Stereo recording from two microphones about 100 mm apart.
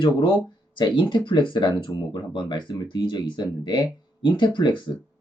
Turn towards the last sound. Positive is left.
turn(degrees=50)  # may be behind; listen again after turning